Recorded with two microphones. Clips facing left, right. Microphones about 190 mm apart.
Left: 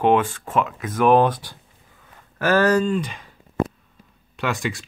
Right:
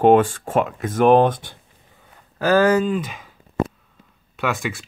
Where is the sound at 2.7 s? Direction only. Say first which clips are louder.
Right 1 dB; 5° right (ahead or behind).